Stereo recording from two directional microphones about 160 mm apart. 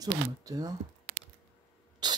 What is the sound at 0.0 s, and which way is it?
Speech, 20° right (ahead or behind).